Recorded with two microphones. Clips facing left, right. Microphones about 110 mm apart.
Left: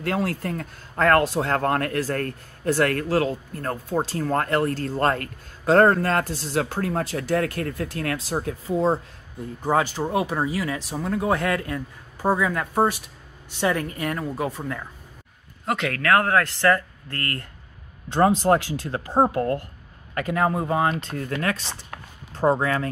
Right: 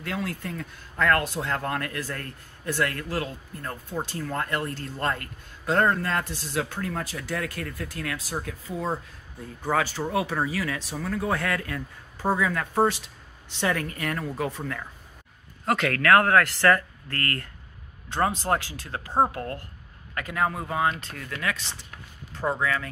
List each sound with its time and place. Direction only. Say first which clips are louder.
0.0 s speech: left 6 dB; 45° left (ahead or behind)
7.3 s speech: left 8 dB; 55° left (ahead or behind)
8.2 s speech: left 6 dB; 30° left (ahead or behind)
10.2 s speech: left 3 dB; 15° left (ahead or behind); by 22.8 s 35° left (ahead or behind)